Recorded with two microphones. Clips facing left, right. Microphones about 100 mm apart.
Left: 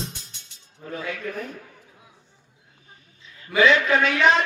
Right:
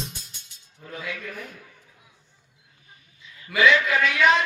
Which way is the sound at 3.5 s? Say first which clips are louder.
Left 2 dB; 35° left (ahead or behind).